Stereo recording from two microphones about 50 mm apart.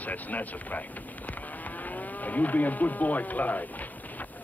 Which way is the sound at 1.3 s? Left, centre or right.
Left.